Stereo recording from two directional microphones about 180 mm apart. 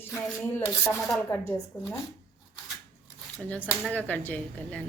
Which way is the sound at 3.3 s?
5° left (ahead or behind).